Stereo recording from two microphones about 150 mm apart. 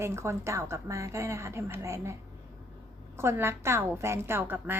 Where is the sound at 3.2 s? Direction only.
15° right (ahead or behind).